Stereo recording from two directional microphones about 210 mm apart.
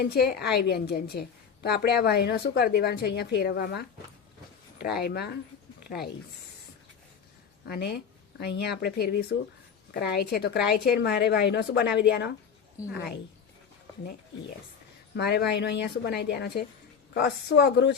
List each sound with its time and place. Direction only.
0.0 s a woman's voice: 50° left (ahead or behind)
7.7 s a woman's voice: 50° left (ahead or behind)